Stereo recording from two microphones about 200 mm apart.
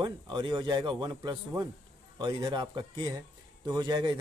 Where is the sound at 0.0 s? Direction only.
20° right (ahead or behind).